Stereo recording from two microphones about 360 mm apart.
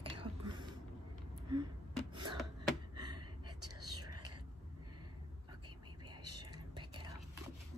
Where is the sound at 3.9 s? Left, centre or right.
Right.